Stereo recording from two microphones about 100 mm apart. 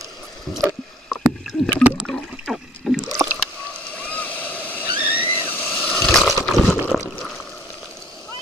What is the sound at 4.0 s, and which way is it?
Vehicle, 15° left (ahead or behind).